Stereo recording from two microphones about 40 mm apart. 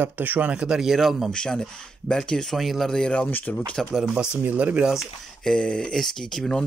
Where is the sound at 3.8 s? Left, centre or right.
Centre.